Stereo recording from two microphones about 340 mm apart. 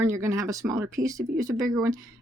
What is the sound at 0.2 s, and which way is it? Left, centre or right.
Speech, centre.